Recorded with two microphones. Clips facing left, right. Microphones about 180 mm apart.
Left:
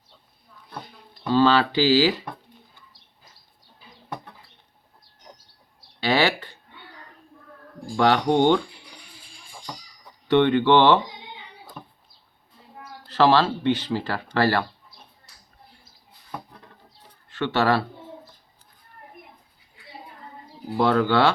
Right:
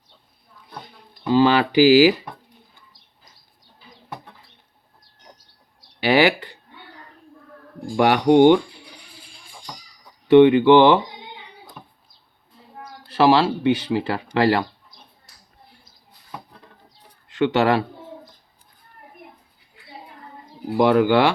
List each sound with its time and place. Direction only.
1.2 s speech: 10° right (ahead or behind)
7.9 s speech: 10° right (ahead or behind)
10.2 s speech: 10° right (ahead or behind)
13.1 s speech: 10° right (ahead or behind)
17.3 s speech: 15° right (ahead or behind)
20.7 s speech: 15° right (ahead or behind)